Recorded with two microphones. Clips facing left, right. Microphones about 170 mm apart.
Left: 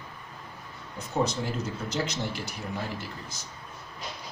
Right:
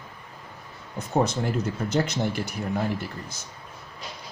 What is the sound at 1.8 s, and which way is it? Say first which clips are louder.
Speech: right 6 dB; 55° right (ahead or behind).